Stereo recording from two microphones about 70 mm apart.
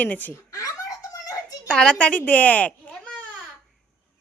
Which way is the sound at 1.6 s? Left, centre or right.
Centre.